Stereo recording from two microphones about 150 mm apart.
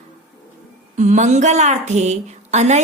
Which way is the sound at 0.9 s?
50° right (ahead or behind).